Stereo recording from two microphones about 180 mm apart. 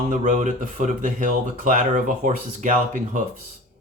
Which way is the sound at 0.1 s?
45° right (ahead or behind).